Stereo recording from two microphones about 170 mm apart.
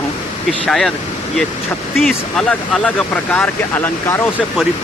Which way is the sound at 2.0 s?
Centre (ahead or behind).